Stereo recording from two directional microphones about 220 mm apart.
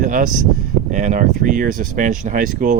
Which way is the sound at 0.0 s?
35° right (ahead or behind).